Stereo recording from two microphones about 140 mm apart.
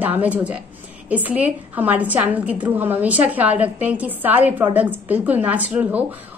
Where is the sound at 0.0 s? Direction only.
10° right (ahead or behind).